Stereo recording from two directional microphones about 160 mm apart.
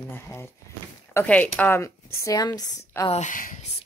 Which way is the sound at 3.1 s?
50° left (ahead or behind).